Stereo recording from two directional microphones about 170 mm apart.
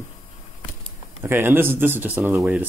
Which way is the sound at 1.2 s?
15° right (ahead or behind).